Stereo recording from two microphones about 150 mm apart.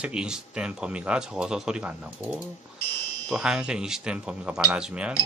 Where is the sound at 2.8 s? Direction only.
15° left (ahead or behind).